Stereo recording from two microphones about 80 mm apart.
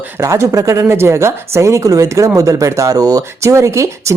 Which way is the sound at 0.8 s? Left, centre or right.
Right.